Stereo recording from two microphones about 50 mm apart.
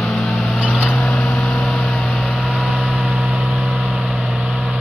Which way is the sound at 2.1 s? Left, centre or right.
Centre.